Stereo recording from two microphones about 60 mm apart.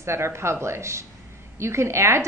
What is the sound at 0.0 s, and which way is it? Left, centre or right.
A woman's voice, right.